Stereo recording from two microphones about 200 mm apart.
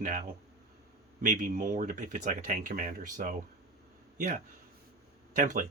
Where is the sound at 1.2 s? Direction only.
40° right (ahead or behind).